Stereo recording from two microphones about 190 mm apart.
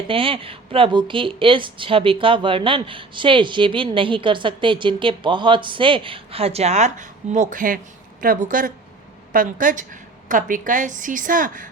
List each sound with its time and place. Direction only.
0.1 s a woman's voice: 30° right (ahead or behind); by 11.7 s 45° right (ahead or behind)